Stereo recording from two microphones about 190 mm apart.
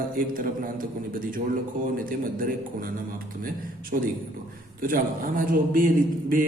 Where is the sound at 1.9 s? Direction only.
50° right (ahead or behind).